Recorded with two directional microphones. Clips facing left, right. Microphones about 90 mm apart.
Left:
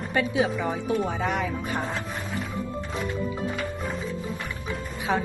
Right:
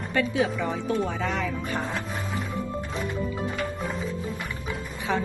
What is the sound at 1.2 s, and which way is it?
Speech, 15° left (ahead or behind).